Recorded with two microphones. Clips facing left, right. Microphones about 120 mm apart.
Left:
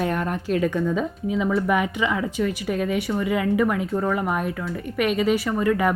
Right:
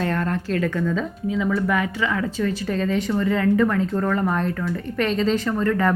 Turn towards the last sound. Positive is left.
turn(degrees=10)  # may be behind; listen again after turning